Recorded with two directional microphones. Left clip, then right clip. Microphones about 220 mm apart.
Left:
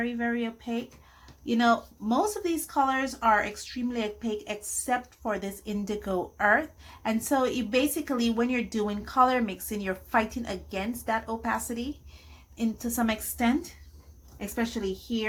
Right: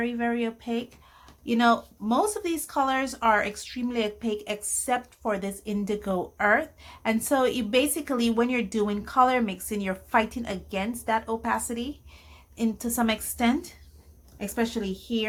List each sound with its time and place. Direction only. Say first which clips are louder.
0.0 s a woman's voice: right 2 dB; 20° right (ahead or behind)